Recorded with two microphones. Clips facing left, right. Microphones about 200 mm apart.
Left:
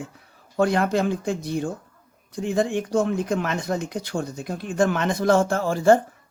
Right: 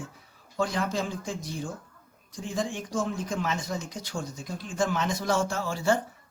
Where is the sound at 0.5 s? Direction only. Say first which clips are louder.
Left 8 dB; 60° left (ahead or behind).